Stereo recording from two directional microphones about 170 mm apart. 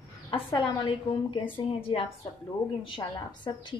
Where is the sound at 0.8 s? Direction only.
30° left (ahead or behind).